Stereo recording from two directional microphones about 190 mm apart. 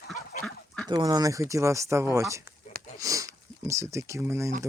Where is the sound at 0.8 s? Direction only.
20° right (ahead or behind).